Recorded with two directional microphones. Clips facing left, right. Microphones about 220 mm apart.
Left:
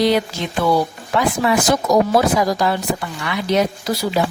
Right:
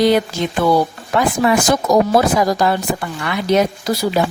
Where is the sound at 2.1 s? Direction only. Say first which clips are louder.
Right 2 dB; 50° right (ahead or behind).